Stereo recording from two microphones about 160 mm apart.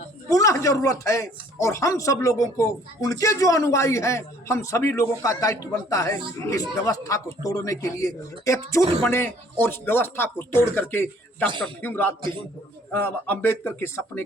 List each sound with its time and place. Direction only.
0.3 s speech: 20° left (ahead or behind)
12.2 s speech: 30° right (ahead or behind)
12.9 s speech: 15° left (ahead or behind)